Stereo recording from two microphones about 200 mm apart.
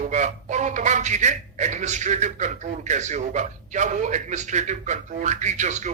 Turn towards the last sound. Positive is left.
turn(degrees=-35)  # may be behind; listen again after turning